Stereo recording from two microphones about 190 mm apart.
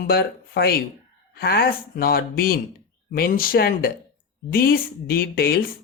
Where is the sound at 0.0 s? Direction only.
55° left (ahead or behind).